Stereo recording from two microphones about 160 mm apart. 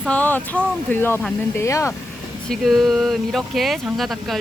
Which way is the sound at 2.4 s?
Centre (ahead or behind).